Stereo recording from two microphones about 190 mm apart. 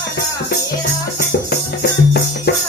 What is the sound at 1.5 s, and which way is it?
Music, 55° left (ahead or behind).